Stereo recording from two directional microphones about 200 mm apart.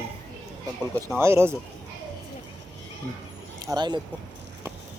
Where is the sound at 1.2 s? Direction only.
15° right (ahead or behind).